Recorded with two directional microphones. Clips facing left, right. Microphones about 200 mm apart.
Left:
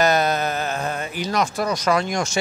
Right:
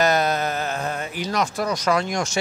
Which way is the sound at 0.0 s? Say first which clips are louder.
Left 1 dB; 10° left (ahead or behind).